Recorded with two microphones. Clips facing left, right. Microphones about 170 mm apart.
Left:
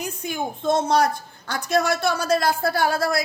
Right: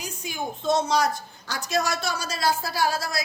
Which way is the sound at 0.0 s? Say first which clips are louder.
Left 4 dB; 55° left (ahead or behind).